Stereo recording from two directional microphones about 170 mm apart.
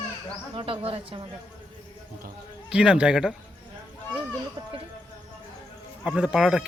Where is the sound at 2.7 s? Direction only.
5° right (ahead or behind).